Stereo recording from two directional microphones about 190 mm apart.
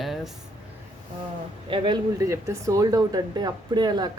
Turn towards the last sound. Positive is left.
turn(degrees=-20)  # may be behind; listen again after turning